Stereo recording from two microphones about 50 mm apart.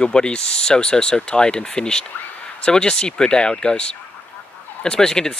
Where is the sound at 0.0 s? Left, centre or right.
Centre.